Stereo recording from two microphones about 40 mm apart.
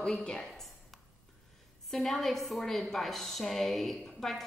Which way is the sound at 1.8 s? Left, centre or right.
Centre.